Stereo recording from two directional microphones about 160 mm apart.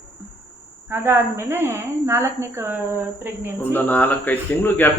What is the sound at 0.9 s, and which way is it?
A woman's voice, 15° right (ahead or behind).